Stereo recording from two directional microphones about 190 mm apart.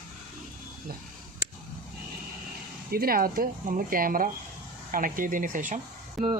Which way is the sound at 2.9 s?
50° right (ahead or behind).